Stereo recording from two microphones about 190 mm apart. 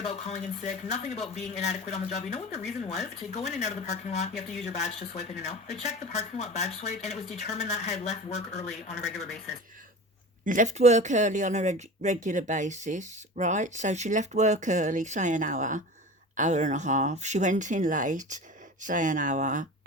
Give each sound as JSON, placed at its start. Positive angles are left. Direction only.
{"t": 0.0, "sound": "speech", "side_deg": 35}
{"t": 10.4, "sound": "speech", "side_deg": -45}